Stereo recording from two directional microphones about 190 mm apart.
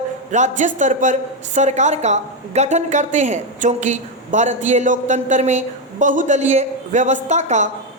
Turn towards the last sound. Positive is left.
turn(degrees=-40)  # may be behind; listen again after turning